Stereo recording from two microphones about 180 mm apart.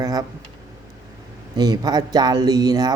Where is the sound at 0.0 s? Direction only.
20° right (ahead or behind).